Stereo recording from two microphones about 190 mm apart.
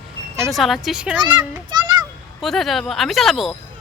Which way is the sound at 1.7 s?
20° right (ahead or behind).